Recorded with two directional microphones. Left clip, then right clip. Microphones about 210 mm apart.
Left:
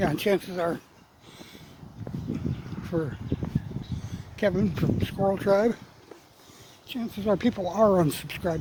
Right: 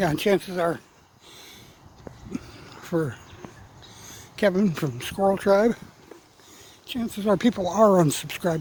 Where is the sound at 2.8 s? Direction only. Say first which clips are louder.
Right 4 dB; 20° right (ahead or behind).